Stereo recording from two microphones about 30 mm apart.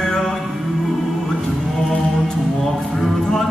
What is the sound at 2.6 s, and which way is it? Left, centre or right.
Music, centre.